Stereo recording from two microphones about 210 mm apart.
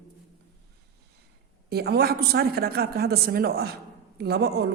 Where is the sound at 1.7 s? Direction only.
50° right (ahead or behind).